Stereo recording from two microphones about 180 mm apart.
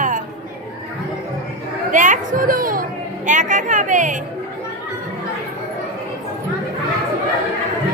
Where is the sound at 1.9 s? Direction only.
45° right (ahead or behind).